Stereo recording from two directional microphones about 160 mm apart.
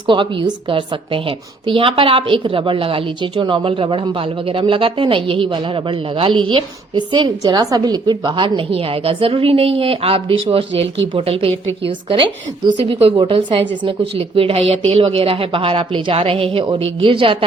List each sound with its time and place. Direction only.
0.1 s a woman's voice: 30° right (ahead or behind)